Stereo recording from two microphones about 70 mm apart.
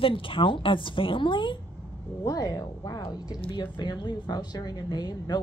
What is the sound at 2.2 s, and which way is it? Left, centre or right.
Speech, left.